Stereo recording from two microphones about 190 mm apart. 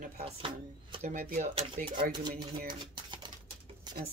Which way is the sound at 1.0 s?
40° right (ahead or behind).